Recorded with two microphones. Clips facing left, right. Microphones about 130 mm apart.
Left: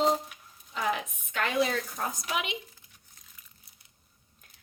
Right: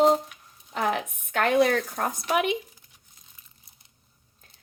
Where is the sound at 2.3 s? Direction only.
50° right (ahead or behind).